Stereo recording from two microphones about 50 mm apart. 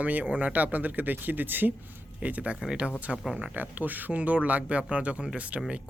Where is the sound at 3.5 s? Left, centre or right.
Right.